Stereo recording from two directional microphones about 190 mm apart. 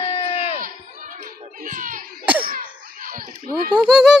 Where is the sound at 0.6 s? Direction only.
45° right (ahead or behind).